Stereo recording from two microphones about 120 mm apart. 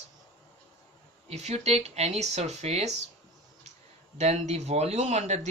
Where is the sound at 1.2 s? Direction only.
65° right (ahead or behind).